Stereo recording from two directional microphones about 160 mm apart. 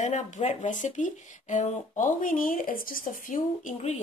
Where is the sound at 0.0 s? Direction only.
45° left (ahead or behind).